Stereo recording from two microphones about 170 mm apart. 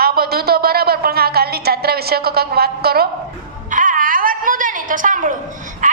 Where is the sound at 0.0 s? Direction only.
65° right (ahead or behind).